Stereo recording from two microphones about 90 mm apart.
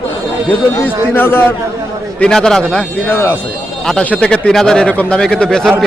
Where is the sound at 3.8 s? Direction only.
10° left (ahead or behind).